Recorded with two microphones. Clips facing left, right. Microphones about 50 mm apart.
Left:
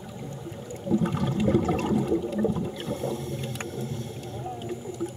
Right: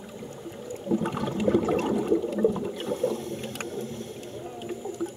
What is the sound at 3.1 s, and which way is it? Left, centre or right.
Boat, right.